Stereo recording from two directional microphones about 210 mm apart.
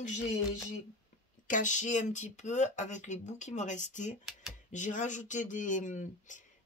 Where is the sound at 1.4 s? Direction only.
35° left (ahead or behind).